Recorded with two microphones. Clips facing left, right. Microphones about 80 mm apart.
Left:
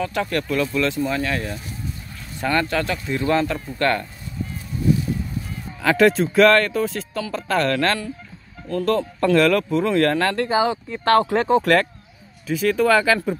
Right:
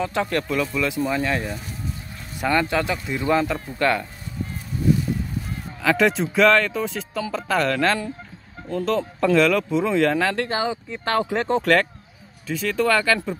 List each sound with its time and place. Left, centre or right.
0.0 s speech: right
5.8 s speech: centre
9.7 s speech: centre
9.9 s speech: centre
10.3 s speech: centre
11.1 s speech: left
11.4 s speech: centre